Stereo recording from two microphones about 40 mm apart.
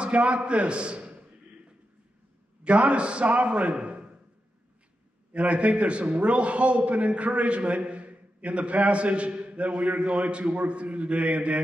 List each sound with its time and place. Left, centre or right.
0.0 s a man's voice: right
2.6 s a man's voice: right
5.3 s a man's voice: right